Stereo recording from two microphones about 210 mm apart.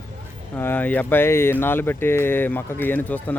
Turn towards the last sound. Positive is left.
turn(degrees=10)  # may be behind; listen again after turning